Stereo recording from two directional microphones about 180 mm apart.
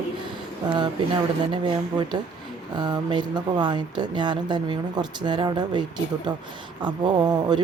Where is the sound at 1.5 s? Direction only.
25° right (ahead or behind).